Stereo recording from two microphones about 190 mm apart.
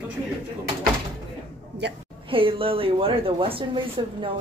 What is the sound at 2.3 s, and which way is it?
Speech, 30° right (ahead or behind).